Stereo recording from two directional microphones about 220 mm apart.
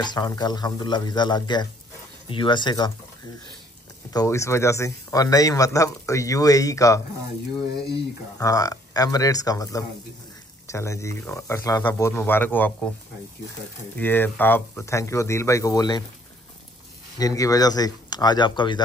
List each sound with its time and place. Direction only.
0.0 s speech: 20° left (ahead or behind)
4.1 s speech: 15° left (ahead or behind)
8.4 s speech: 15° left (ahead or behind)
13.9 s speech: 10° left (ahead or behind)
17.2 s speech: 15° left (ahead or behind)